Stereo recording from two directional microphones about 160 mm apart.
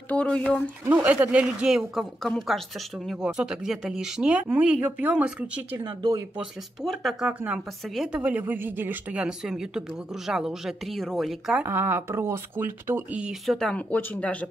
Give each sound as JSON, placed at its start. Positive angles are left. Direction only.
{"t": 0.1, "sound": "speech", "side_deg": 5}
{"t": 0.8, "sound": "speech", "side_deg": -10}
{"t": 5.9, "sound": "speech", "side_deg": -30}
{"t": 6.3, "sound": "speech", "side_deg": 0}
{"t": 11.6, "sound": "speech", "side_deg": -15}